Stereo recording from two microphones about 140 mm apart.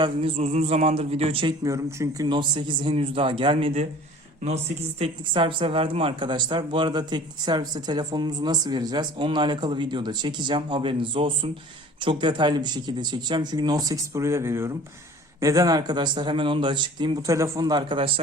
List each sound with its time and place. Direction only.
0.0 s speech: 45° right (ahead or behind)
1.6 s speech: 20° right (ahead or behind)
2.2 s speech: 35° right (ahead or behind)
17.2 s speech: 20° right (ahead or behind); by 18.1 s 35° right (ahead or behind)